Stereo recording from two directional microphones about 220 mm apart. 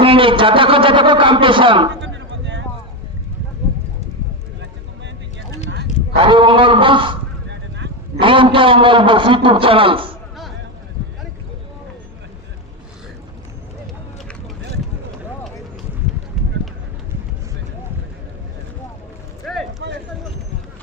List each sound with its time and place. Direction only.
0.0 s a man's voice: 25° right (ahead or behind)
2.0 s a sound: 55° right (ahead or behind)
6.1 s a man's voice: 20° right (ahead or behind)
8.2 s a man's voice: 25° right (ahead or behind)
19.4 s a sound: centre (ahead or behind)
19.8 s run: 55° right (ahead or behind)